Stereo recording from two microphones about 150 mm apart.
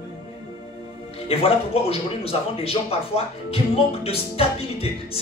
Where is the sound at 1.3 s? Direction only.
40° left (ahead or behind).